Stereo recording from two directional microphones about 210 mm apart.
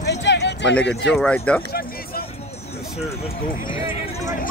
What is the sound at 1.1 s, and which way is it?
Speech, 5° left (ahead or behind).